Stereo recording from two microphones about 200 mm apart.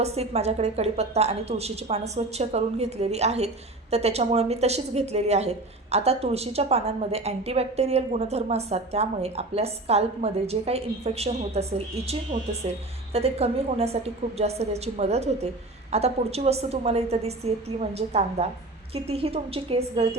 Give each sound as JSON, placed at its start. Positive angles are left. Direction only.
{"t": 0.0, "sound": "a woman's voice", "side_deg": -30}